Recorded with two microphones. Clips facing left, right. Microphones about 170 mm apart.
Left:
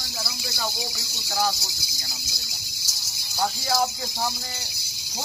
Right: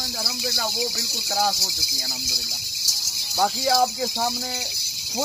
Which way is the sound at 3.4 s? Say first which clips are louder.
Right 4 dB; 90° right.